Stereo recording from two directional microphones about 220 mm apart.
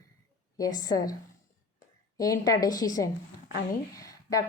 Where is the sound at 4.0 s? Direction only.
15° left (ahead or behind).